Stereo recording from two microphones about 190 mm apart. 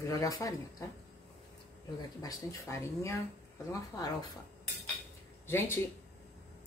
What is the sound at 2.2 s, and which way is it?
A woman's voice, 15° left (ahead or behind).